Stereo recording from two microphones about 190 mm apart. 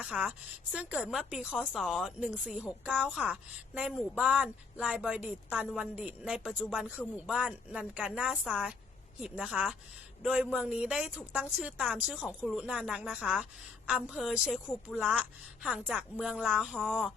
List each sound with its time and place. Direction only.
0.0 s speech: 5° right (ahead or behind)